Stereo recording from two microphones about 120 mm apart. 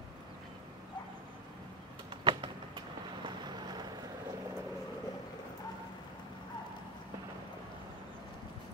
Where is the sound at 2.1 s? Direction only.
45° right (ahead or behind).